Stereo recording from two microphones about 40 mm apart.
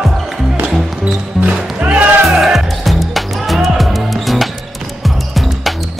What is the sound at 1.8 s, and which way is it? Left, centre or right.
Music, right.